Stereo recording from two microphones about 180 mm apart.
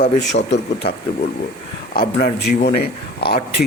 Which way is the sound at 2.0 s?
60° left (ahead or behind).